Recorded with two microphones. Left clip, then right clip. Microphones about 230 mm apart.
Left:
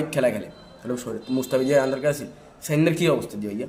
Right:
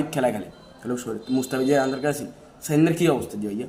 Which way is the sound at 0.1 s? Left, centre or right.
Centre.